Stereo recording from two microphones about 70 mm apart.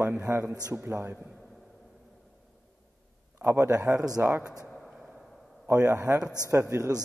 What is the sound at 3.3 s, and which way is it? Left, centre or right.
Speech, right.